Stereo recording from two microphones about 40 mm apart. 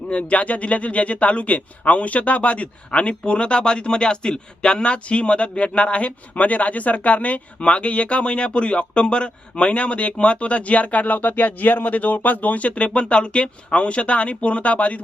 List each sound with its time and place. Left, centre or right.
0.1 s speech: left